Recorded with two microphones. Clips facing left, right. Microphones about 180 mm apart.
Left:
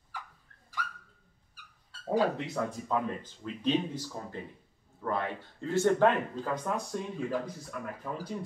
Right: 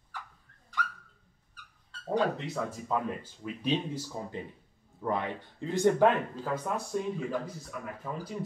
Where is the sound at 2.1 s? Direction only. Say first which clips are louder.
Left 1 dB; centre (ahead or behind).